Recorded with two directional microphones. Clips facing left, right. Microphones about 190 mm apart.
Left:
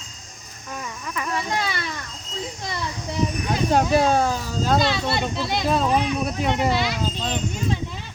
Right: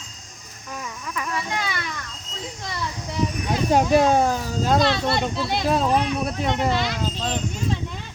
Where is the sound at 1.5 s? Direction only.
35° left (ahead or behind).